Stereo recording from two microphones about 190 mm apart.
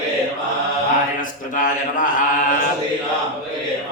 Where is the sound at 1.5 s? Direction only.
45° left (ahead or behind).